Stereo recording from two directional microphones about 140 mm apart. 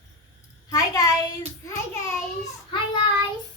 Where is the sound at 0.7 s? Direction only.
25° left (ahead or behind).